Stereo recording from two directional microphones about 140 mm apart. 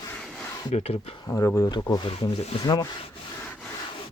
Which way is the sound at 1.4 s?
15° left (ahead or behind).